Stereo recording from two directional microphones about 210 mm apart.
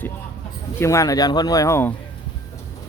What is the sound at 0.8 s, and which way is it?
Speech, 15° left (ahead or behind).